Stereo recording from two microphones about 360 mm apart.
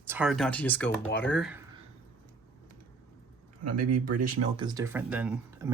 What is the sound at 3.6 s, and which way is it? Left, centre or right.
Speech, right.